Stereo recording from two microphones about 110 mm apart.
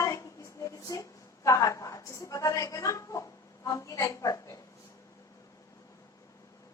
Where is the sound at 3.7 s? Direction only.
30° left (ahead or behind).